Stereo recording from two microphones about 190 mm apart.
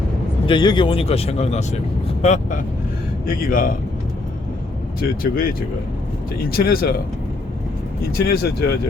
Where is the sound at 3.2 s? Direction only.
50° left (ahead or behind).